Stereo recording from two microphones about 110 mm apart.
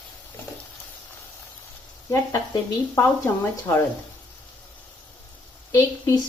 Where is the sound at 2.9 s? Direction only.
20° left (ahead or behind).